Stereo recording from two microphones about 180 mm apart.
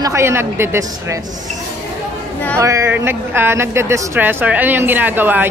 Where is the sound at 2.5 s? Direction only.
15° right (ahead or behind).